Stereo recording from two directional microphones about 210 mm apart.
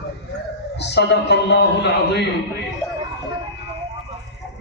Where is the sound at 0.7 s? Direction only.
55° left (ahead or behind).